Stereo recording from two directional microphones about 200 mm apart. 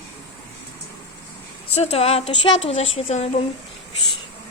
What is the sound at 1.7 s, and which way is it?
A woman's voice, 30° left (ahead or behind).